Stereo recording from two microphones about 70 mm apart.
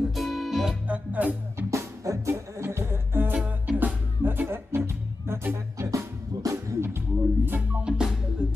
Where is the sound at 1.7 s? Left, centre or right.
Right.